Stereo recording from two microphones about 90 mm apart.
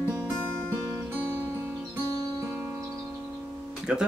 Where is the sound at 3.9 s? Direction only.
10° right (ahead or behind).